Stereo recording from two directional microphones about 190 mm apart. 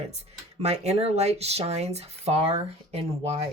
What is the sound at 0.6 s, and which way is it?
Speech, 35° right (ahead or behind).